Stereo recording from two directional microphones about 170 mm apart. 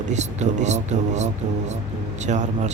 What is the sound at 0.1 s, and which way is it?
A man's voice, 40° right (ahead or behind).